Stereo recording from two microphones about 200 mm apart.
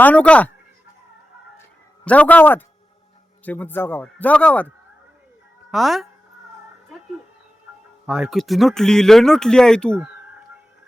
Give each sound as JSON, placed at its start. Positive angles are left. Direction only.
{"t": 0.0, "sound": "a man's voice", "side_deg": 5}
{"t": 2.0, "sound": "a man's voice", "side_deg": 5}
{"t": 5.7, "sound": "speech", "side_deg": 0}
{"t": 8.0, "sound": "speech", "side_deg": -5}